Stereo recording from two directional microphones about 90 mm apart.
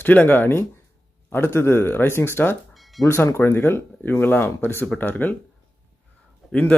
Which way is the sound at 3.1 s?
30° left (ahead or behind).